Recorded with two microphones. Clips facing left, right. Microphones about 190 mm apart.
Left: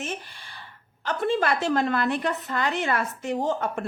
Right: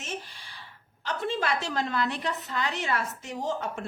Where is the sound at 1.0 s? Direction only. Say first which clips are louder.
Left 5 dB; 55° left (ahead or behind).